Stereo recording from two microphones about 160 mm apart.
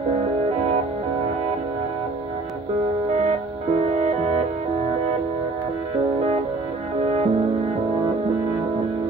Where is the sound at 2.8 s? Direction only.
40° right (ahead or behind).